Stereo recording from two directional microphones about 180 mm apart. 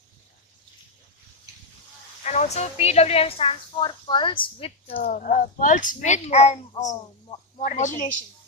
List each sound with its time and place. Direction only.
2.2 s speech: 40° left (ahead or behind)
4.9 s a woman's voice: 50° left (ahead or behind)